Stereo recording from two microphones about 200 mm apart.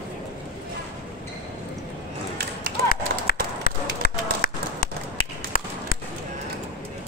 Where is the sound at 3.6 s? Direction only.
45° left (ahead or behind).